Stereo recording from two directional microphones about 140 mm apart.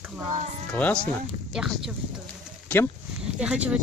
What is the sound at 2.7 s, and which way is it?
Speech, 10° left (ahead or behind).